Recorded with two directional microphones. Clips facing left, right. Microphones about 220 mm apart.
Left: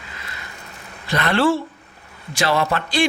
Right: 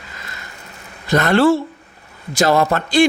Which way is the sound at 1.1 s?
45° right (ahead or behind).